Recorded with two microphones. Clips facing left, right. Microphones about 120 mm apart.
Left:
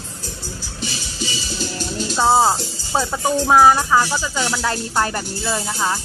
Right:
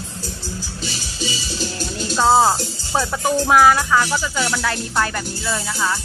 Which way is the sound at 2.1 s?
15° left (ahead or behind).